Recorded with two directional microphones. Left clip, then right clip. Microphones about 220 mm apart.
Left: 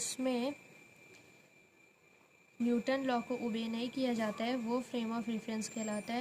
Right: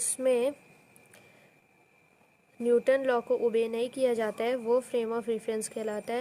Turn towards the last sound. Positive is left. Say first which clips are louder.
# right 7 dB
turn(degrees=-50)  # may be behind; listen again after turning